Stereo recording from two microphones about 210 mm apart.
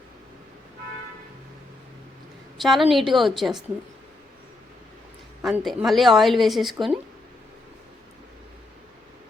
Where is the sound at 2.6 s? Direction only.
Centre (ahead or behind).